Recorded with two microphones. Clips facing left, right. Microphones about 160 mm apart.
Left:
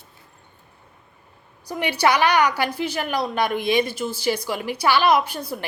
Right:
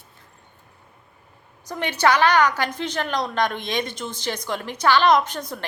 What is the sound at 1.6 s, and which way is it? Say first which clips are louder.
A woman's voice: even; 10° left (ahead or behind).